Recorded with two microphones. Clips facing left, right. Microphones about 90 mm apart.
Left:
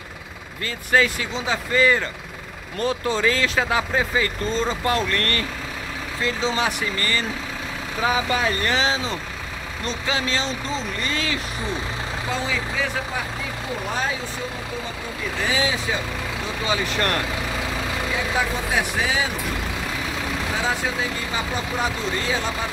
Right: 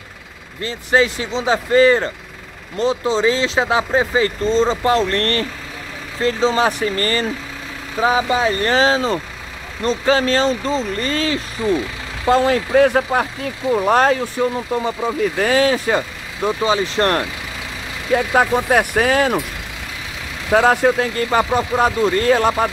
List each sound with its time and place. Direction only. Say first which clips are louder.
0.6 s speech: right 4 dB; 25° right (ahead or behind)
2.8 s speech: right 5 dB; 20° right (ahead or behind); by 7.2 s 40° right (ahead or behind)
8.0 s speech: right 6 dB; 30° right (ahead or behind)
12.3 s speech: right 14 dB; 65° right (ahead or behind)
15.3 s speech: right 6 dB; 55° right (ahead or behind)
16.6 s speech: right 5 dB; 35° right (ahead or behind)
18.1 s speech: right 11 dB; 55° right (ahead or behind)
20.5 s speech: right 14 dB; 60° right (ahead or behind)